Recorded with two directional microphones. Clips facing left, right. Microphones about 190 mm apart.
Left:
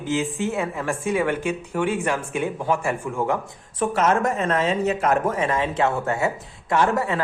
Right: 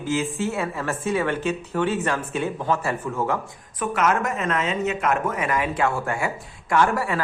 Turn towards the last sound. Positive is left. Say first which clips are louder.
# even
turn(degrees=20)  # may be behind; listen again after turning